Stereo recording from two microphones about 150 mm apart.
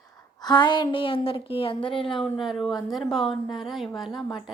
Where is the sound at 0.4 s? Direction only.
30° left (ahead or behind).